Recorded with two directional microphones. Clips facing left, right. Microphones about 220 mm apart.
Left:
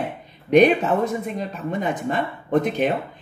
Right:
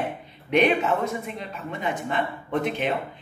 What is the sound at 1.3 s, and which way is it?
A woman's voice, 40° left (ahead or behind).